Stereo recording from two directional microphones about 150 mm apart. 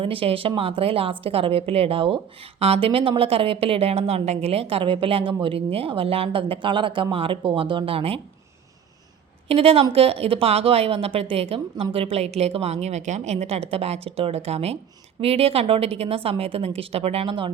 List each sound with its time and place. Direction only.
0.0 s a woman's voice: 35° right (ahead or behind)
9.5 s a woman's voice: 40° right (ahead or behind)